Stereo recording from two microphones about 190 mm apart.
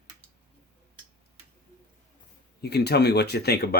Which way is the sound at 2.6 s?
60° left (ahead or behind).